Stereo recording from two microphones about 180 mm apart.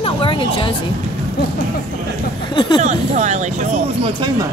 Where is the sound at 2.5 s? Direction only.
25° left (ahead or behind).